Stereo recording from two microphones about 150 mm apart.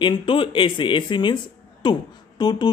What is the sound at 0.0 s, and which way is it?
Speech, 35° left (ahead or behind).